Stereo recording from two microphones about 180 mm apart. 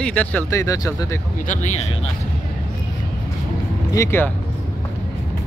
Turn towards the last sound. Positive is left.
turn(degrees=15)  # may be behind; listen again after turning